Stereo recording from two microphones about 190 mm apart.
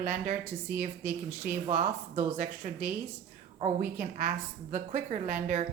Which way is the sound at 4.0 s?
45° right (ahead or behind).